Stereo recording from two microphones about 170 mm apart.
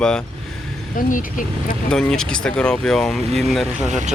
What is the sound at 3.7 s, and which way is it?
Speech, 45° right (ahead or behind).